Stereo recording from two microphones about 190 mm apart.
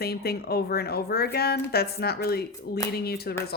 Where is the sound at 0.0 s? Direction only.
55° left (ahead or behind).